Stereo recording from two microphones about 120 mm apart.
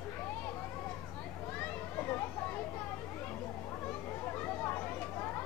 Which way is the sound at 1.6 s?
15° left (ahead or behind).